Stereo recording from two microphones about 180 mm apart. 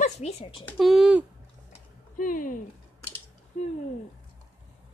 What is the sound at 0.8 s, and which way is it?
Speech, centre (ahead or behind).